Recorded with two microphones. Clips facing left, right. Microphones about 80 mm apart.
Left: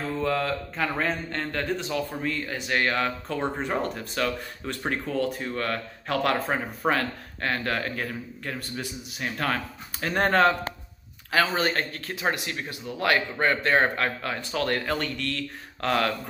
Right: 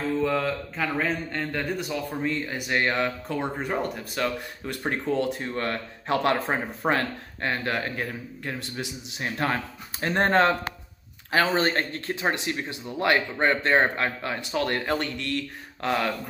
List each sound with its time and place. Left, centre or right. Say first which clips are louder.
0.2 s speech: right 1 dB; centre
1.9 s speech: even; right
3.3 s speech: left 1 dB; centre
4.6 s speech: right 2 dB; right
6.8 s speech: even; centre
7.4 s speech: even; centre
11.5 s speech: right 2 dB; right